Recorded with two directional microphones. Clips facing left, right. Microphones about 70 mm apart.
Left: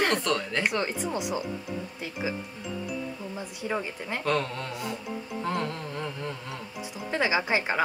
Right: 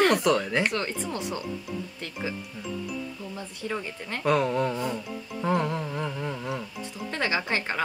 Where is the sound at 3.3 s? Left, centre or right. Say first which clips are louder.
Left 2 dB; centre.